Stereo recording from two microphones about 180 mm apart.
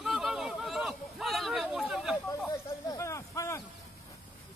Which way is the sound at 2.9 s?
15° left (ahead or behind).